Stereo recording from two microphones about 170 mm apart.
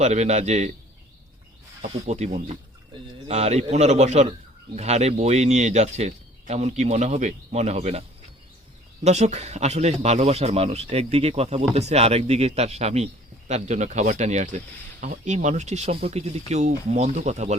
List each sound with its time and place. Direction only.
0.0 s a man's voice: 40° right (ahead or behind)
1.8 s a man's voice: 40° right (ahead or behind)
9.0 s a man's voice: 40° right (ahead or behind)